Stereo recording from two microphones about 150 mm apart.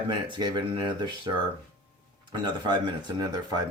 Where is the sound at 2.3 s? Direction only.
30° right (ahead or behind).